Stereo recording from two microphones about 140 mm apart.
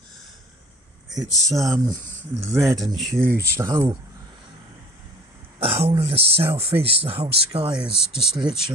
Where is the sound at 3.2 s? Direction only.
20° right (ahead or behind).